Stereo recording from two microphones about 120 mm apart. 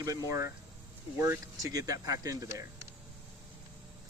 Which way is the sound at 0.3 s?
25° right (ahead or behind).